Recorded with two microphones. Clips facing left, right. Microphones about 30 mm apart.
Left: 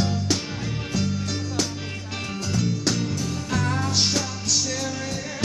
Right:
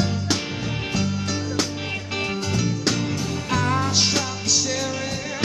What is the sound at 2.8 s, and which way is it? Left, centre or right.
Music, right.